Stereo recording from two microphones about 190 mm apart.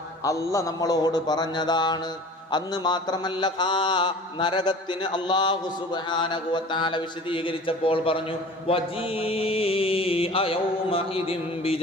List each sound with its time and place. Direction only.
0.2 s mantra: 15° left (ahead or behind)